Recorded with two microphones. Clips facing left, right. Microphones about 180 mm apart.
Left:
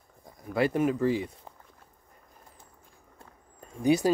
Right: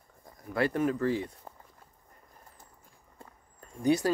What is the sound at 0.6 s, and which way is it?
Speech, 10° left (ahead or behind).